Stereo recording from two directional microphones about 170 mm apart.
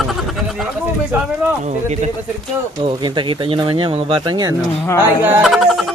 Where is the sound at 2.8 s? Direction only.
25° right (ahead or behind).